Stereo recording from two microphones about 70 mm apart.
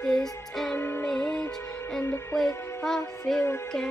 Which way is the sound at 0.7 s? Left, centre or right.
Left.